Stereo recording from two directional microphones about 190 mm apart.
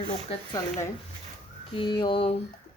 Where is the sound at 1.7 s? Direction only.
25° left (ahead or behind).